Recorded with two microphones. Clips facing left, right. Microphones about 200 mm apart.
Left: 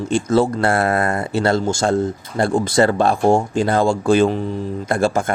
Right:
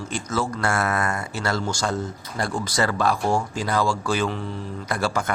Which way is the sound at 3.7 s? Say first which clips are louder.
Left 8 dB; 55° left (ahead or behind).